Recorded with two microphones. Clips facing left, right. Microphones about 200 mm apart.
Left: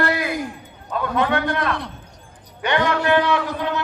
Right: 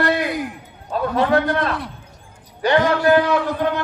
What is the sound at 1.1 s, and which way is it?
A man's voice, 35° right (ahead or behind).